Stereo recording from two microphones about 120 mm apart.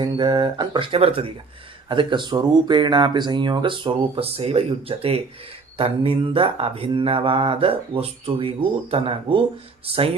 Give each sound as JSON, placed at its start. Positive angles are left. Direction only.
{"t": 0.0, "sound": "speech", "side_deg": -40}
{"t": 1.9, "sound": "mantra", "side_deg": -45}
{"t": 9.8, "sound": "speech", "side_deg": -55}